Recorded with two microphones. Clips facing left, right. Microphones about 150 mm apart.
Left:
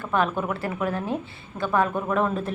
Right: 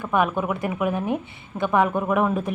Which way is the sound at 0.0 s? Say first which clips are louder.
Right 2 dB; 15° right (ahead or behind).